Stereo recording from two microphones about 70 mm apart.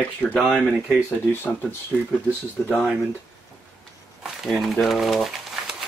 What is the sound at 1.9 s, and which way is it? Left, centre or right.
Speech, centre.